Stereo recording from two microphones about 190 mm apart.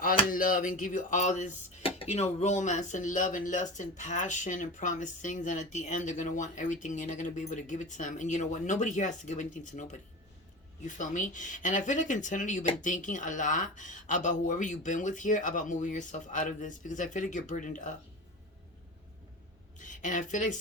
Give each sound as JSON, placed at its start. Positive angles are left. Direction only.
{"t": 0.3, "sound": "speech", "side_deg": 45}
{"t": 19.8, "sound": "speech", "side_deg": 40}